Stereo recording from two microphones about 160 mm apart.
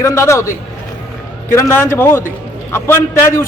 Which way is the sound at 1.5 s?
15° left (ahead or behind).